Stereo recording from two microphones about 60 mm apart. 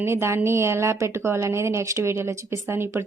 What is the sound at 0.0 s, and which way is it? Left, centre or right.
A woman's voice, right.